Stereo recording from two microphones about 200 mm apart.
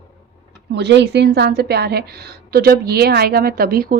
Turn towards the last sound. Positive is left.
turn(degrees=-50)  # may be behind; listen again after turning